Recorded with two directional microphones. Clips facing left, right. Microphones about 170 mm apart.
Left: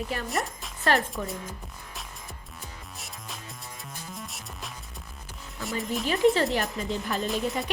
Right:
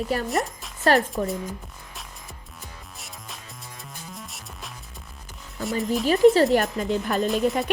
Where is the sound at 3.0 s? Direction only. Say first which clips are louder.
Left 1 dB; centre (ahead or behind).